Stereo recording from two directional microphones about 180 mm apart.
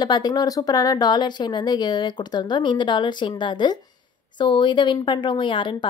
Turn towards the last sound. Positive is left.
turn(degrees=25)  # may be behind; listen again after turning